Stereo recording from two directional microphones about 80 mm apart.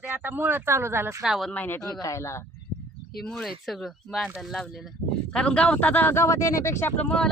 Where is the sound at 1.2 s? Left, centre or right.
Centre.